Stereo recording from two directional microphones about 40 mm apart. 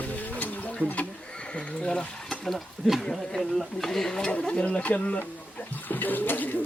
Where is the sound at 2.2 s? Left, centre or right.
Centre.